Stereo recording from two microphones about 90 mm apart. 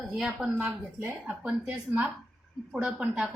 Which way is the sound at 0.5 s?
25° right (ahead or behind).